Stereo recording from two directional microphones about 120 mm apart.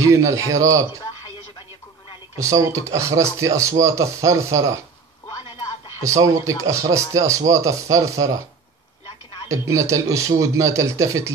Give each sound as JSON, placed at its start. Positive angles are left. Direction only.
{"t": 0.0, "sound": "speech", "side_deg": -25}
{"t": 2.6, "sound": "speech", "side_deg": -25}
{"t": 6.0, "sound": "speech", "side_deg": -30}
{"t": 9.5, "sound": "speech", "side_deg": -25}